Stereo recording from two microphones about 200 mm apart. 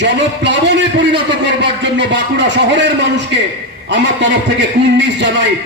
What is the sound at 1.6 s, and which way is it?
A man's voice, 65° right (ahead or behind).